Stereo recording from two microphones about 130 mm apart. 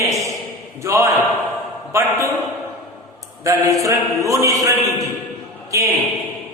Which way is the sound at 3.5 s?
25° right (ahead or behind).